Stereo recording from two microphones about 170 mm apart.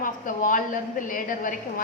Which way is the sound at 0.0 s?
50° left (ahead or behind).